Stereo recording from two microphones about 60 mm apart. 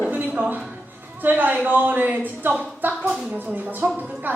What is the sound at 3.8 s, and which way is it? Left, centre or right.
Speech, right.